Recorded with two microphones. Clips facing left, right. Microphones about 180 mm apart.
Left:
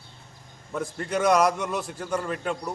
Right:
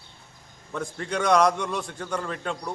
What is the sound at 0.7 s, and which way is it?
A man's voice, 5° left (ahead or behind).